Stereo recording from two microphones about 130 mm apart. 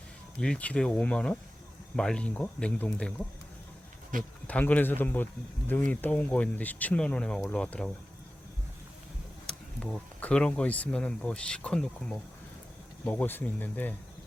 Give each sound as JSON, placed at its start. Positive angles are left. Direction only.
{"t": 0.3, "sound": "speech", "side_deg": 10}
{"t": 4.1, "sound": "speech", "side_deg": -90}
{"t": 4.4, "sound": "speech", "side_deg": 10}
{"t": 9.5, "sound": "speech", "side_deg": 5}